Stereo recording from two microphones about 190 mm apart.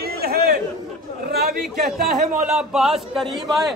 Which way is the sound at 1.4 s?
50° right (ahead or behind).